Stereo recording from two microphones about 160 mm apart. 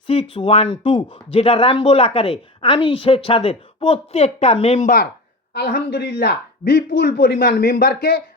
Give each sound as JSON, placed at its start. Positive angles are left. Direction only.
{"t": 0.1, "sound": "speech", "side_deg": 35}
{"t": 5.5, "sound": "a man's voice", "side_deg": 85}